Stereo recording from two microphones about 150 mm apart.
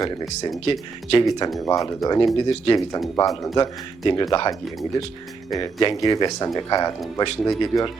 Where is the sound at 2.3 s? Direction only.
30° left (ahead or behind).